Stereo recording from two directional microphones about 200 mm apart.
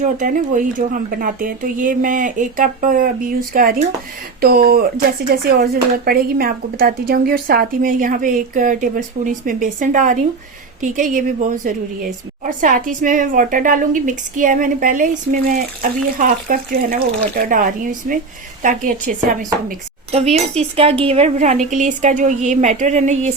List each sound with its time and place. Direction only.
0.0 s a woman's voice: 40° right (ahead or behind)
18.0 s a woman's voice: 40° right (ahead or behind)